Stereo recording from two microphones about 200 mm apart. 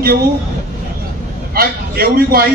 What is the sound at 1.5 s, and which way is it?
Speech, 50° right (ahead or behind).